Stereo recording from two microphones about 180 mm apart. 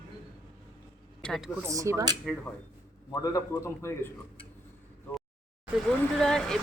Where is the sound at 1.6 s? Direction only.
15° right (ahead or behind).